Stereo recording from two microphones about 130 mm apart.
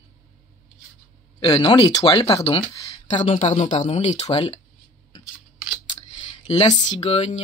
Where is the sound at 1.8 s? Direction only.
30° left (ahead or behind).